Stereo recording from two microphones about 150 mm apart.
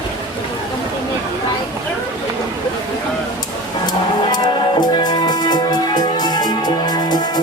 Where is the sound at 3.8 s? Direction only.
30° left (ahead or behind).